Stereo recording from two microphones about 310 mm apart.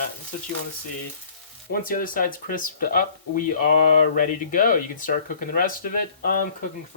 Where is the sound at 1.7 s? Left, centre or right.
Left.